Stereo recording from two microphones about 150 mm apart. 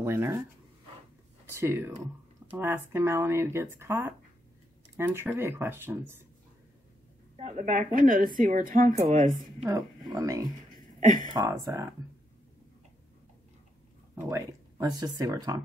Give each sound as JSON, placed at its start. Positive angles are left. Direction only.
{"t": 0.0, "sound": "speech", "side_deg": -15}
{"t": 1.5, "sound": "speech", "side_deg": -15}
{"t": 7.3, "sound": "a woman's voice", "side_deg": -55}
{"t": 9.7, "sound": "speech", "side_deg": -20}
{"t": 11.0, "sound": "speech", "side_deg": -55}
{"t": 11.3, "sound": "speech", "side_deg": -20}
{"t": 14.3, "sound": "speech", "side_deg": -25}